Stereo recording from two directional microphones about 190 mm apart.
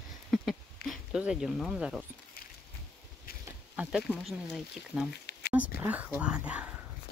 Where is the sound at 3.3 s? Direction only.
50° left (ahead or behind).